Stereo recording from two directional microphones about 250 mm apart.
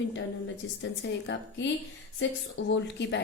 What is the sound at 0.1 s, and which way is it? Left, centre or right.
A woman's voice, left.